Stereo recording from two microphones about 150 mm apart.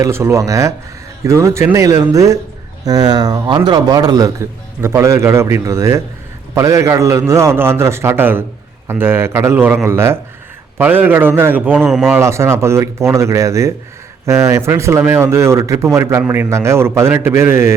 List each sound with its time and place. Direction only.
0.0 s a man's voice: 20° right (ahead or behind)
11.8 s a man's voice: centre (ahead or behind)
12.1 s a man's voice: 20° right (ahead or behind)